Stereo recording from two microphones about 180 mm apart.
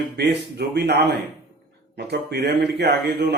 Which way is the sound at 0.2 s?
70° right (ahead or behind).